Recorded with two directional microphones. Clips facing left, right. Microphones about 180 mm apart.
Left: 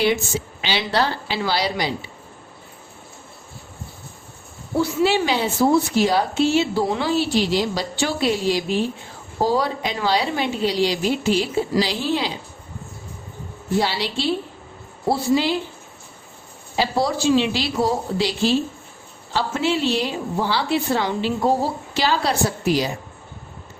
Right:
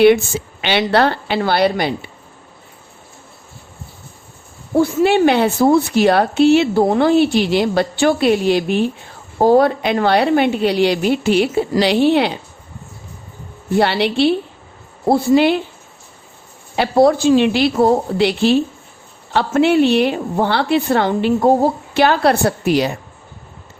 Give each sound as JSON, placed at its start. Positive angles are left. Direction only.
{"t": 0.6, "sound": "a woman's voice", "side_deg": -60}
{"t": 4.8, "sound": "a woman's voice", "side_deg": -55}
{"t": 13.7, "sound": "a woman's voice", "side_deg": -60}
{"t": 16.7, "sound": "a woman's voice", "side_deg": -60}